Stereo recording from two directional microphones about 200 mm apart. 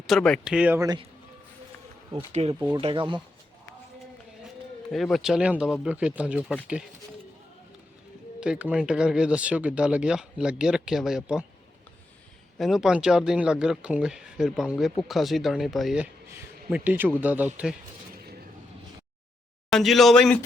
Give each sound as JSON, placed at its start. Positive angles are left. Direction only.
{"t": 0.1, "sound": "speech", "side_deg": 5}
{"t": 2.1, "sound": "speech", "side_deg": -30}
{"t": 4.9, "sound": "speech", "side_deg": 0}
{"t": 8.4, "sound": "speech", "side_deg": -5}
{"t": 12.5, "sound": "a man's voice", "side_deg": 0}
{"t": 18.1, "sound": "a sound", "side_deg": -50}
{"t": 19.7, "sound": "speech", "side_deg": 0}